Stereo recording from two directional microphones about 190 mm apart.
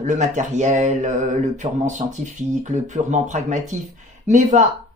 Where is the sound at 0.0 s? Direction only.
40° right (ahead or behind).